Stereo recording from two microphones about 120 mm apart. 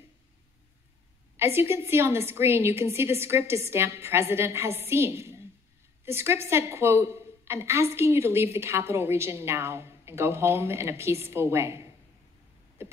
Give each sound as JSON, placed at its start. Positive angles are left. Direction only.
{"t": 1.3, "sound": "a woman's voice", "side_deg": -20}